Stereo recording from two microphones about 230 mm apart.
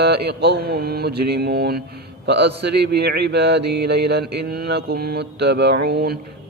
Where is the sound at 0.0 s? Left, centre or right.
Right.